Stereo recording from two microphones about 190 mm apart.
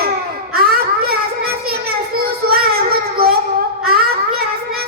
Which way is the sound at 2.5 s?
50° right (ahead or behind).